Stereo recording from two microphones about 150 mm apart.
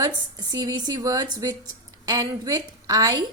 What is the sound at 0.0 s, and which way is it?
A woman's voice, 25° right (ahead or behind).